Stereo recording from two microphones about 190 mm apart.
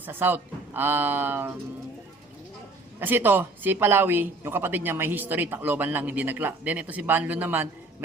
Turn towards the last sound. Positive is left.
turn(degrees=-10)  # may be behind; listen again after turning